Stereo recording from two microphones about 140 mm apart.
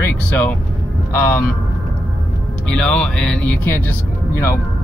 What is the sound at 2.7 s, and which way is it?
Speech, 5° left (ahead or behind).